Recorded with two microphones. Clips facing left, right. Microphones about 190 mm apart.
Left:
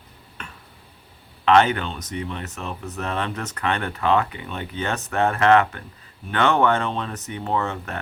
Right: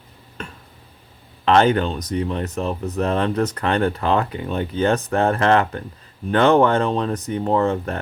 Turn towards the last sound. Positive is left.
turn(degrees=-35)  # may be behind; listen again after turning